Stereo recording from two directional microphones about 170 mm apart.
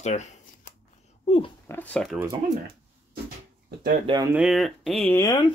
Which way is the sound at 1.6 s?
10° left (ahead or behind).